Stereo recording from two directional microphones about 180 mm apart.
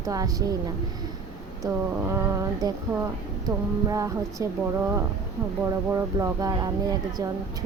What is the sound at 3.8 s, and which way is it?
Speech, 20° right (ahead or behind).